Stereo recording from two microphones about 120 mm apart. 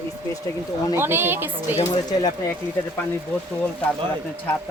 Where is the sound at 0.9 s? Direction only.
20° right (ahead or behind).